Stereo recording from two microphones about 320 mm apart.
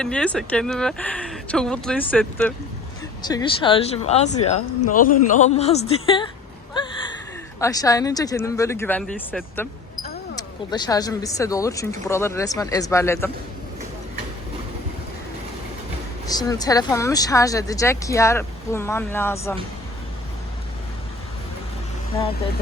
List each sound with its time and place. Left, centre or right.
0.0 s speech: centre
6.7 s gasp: centre
7.6 s speech: centre
16.2 s speech: centre